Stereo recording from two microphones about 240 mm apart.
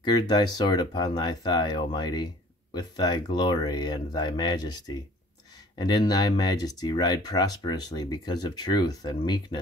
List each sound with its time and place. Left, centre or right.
0.0 s speech: centre